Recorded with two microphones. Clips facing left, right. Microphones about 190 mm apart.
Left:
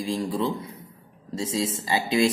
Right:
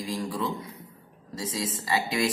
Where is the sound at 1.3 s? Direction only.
25° left (ahead or behind).